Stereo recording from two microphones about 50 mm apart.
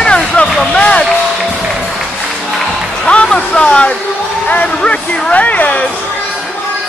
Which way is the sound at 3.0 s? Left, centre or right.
Left.